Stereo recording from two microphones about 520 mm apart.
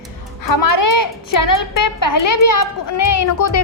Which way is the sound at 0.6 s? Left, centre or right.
Left.